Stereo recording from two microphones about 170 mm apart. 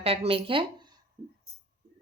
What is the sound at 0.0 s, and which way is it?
Speech, 35° right (ahead or behind).